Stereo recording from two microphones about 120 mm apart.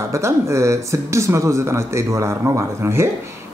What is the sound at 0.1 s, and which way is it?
A man's voice, 25° right (ahead or behind).